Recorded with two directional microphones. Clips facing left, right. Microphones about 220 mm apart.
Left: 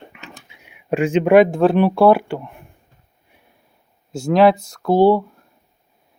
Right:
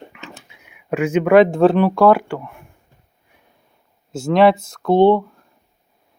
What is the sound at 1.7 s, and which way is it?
Speech, 15° left (ahead or behind).